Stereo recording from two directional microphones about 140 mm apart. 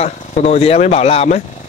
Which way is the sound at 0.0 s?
50° left (ahead or behind).